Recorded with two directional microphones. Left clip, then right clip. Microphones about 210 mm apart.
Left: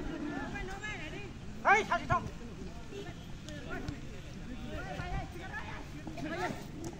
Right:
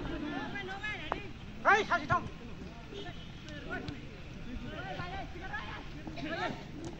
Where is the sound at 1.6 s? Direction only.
50° left (ahead or behind).